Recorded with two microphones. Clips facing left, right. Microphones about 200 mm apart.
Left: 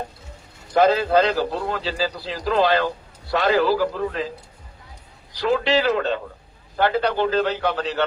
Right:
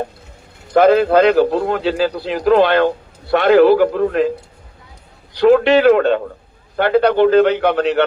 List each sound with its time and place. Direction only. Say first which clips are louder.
0.7 s a man's voice: right 6 dB; 55° right (ahead or behind)
5.3 s a man's voice: right 9 dB; 60° right (ahead or behind)